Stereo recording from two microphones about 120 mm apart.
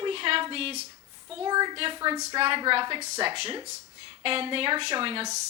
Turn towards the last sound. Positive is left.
turn(degrees=-50)  # may be behind; listen again after turning